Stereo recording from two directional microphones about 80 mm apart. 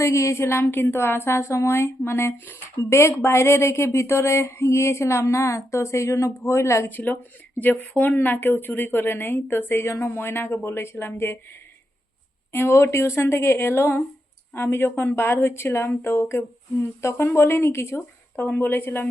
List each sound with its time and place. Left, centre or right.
0.0 s speech: left
6.8 s a woman's voice: left
12.5 s speech: left
18.4 s a woman's voice: left